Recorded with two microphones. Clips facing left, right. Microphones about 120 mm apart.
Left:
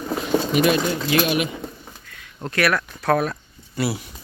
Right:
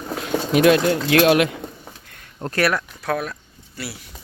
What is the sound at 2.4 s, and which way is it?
Speech, 30° right (ahead or behind).